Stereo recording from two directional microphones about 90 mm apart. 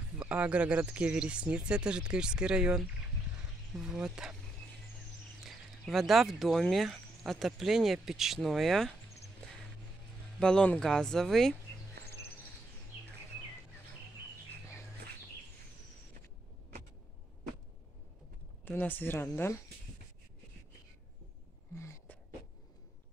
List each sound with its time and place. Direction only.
0.2 s speech: 15° right (ahead or behind)
5.4 s speech: centre (ahead or behind)
10.4 s speech: 10° left (ahead or behind)
18.7 s speech: 20° left (ahead or behind)
21.7 s a sound: 35° left (ahead or behind)